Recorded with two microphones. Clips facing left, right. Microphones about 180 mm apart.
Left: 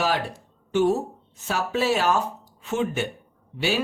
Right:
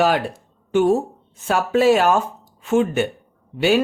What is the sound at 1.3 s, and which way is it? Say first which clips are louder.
Speech: right 7 dB; 55° right (ahead or behind).